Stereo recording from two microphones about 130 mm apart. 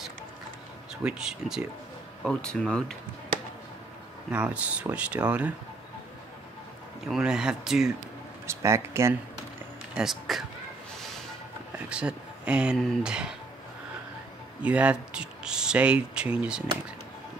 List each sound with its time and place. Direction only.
1.0 s speech: 5° right (ahead or behind)
2.2 s speech: 5° left (ahead or behind)
4.3 s speech: 10° right (ahead or behind)
7.1 s speech: 5° right (ahead or behind)
8.5 s speech: 20° right (ahead or behind)
9.9 s speech: centre (ahead or behind)
11.9 s a sound: 10° right (ahead or behind)
12.7 s speech: 5° right (ahead or behind)
14.6 s speech: 10° right (ahead or behind)